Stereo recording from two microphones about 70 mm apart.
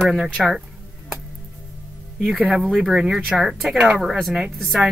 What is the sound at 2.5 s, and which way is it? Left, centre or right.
Speech, centre.